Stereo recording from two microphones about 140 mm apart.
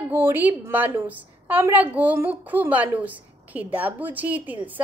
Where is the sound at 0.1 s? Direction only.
15° right (ahead or behind).